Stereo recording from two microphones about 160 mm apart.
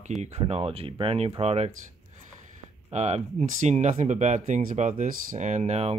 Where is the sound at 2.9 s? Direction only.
45° right (ahead or behind).